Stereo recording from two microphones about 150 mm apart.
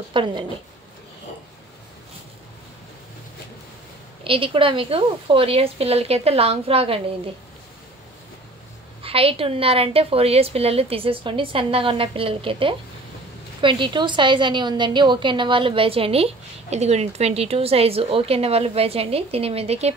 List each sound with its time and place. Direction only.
0.1 s a woman's voice: 35° right (ahead or behind)
4.2 s a woman's voice: 35° right (ahead or behind)
9.0 s a woman's voice: 40° right (ahead or behind)